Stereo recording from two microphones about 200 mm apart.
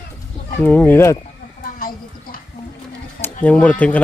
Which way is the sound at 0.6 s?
10° left (ahead or behind).